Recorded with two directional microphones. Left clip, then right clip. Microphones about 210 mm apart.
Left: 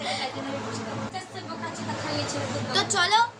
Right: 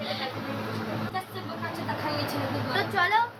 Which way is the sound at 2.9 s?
15° left (ahead or behind).